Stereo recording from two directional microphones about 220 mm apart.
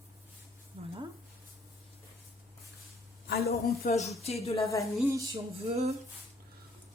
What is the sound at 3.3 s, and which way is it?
Speech, 45° left (ahead or behind).